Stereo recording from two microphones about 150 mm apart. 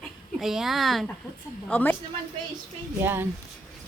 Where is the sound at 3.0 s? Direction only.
15° right (ahead or behind).